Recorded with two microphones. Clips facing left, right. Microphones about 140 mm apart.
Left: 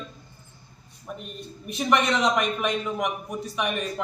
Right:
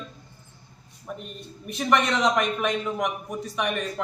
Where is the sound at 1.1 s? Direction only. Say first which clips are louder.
Even; 5° left (ahead or behind).